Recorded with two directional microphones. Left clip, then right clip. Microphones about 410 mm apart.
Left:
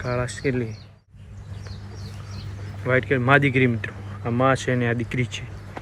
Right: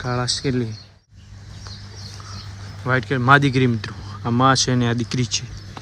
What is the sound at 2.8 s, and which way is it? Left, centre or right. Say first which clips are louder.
Speech: even; centre.